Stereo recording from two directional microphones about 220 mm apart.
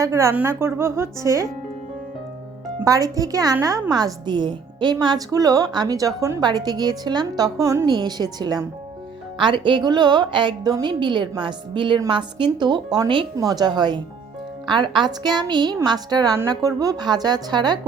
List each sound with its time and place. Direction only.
0.0 s a woman's voice: 15° right (ahead or behind)
2.8 s a woman's voice: 15° right (ahead or behind)